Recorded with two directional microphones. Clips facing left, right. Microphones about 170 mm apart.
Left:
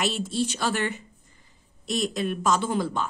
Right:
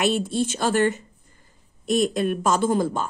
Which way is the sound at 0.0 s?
55° right (ahead or behind).